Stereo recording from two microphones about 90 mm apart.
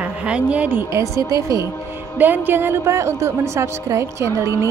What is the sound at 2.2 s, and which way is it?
A woman's voice, 20° right (ahead or behind).